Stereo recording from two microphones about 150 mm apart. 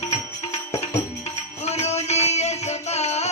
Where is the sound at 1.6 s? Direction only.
45° left (ahead or behind).